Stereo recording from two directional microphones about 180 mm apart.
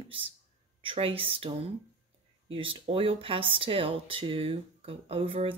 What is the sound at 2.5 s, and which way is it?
Speech, 30° right (ahead or behind).